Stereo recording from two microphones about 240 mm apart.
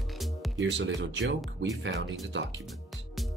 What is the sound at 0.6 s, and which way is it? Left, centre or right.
Speech, right.